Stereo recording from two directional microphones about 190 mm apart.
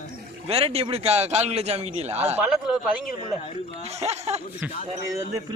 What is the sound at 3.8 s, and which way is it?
Speech, 35° right (ahead or behind).